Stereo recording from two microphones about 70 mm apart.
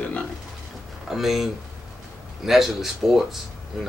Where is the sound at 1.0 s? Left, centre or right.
Centre.